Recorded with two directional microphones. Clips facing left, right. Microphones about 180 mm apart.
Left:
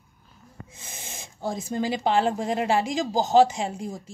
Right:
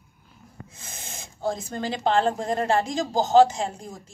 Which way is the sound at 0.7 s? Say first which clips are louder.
Even; 15° left (ahead or behind).